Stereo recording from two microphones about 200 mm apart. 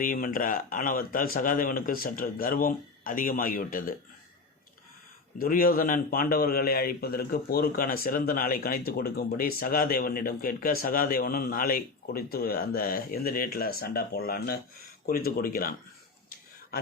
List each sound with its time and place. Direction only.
0.0 s a man's voice: 45° left (ahead or behind)
5.4 s a man's voice: 45° left (ahead or behind)